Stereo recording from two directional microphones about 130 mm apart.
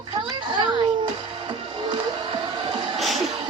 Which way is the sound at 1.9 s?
40° right (ahead or behind).